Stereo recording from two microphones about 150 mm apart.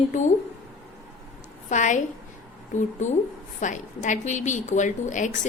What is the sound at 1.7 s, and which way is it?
Speech, 55° left (ahead or behind).